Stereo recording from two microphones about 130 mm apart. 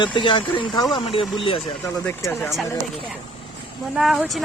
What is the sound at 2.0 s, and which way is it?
Speech, 15° left (ahead or behind).